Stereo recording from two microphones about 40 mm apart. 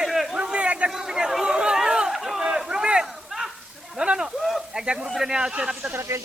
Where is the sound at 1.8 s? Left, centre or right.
Centre.